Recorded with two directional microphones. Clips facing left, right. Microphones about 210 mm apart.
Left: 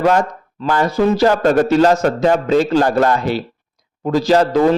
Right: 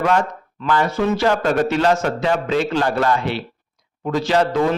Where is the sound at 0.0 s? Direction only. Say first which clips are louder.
Left 4 dB; 40° left (ahead or behind).